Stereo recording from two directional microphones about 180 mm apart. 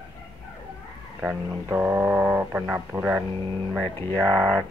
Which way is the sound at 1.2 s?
10° right (ahead or behind).